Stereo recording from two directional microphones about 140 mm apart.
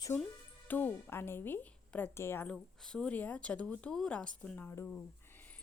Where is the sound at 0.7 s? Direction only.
15° left (ahead or behind).